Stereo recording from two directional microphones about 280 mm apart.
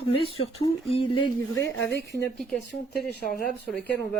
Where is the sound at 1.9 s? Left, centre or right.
Left.